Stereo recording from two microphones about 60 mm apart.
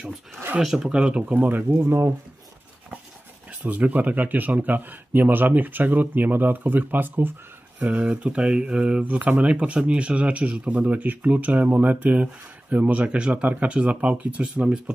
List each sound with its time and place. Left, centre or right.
0.6 s speech: centre
0.8 s speech: centre
1.8 s speech: right
3.4 s speech: right